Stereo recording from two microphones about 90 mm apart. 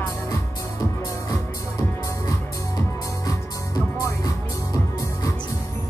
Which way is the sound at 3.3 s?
40° left (ahead or behind).